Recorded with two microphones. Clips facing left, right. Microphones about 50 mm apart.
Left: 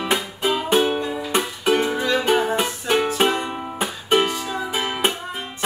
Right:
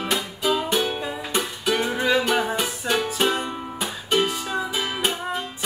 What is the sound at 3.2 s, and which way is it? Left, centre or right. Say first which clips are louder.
Music: left 3 dB; left.